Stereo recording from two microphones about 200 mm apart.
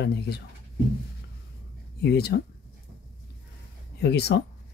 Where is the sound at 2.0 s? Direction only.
55° left (ahead or behind).